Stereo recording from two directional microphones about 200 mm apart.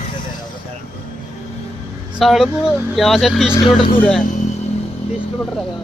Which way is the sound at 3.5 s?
25° left (ahead or behind).